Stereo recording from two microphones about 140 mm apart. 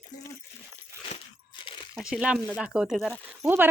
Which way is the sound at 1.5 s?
35° left (ahead or behind).